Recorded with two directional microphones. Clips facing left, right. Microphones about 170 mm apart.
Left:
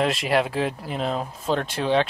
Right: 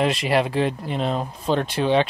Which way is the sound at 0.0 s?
Centre (ahead or behind).